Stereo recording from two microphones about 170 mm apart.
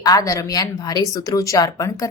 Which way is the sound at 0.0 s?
20° left (ahead or behind).